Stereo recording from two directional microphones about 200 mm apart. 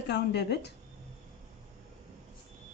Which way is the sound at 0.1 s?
60° left (ahead or behind).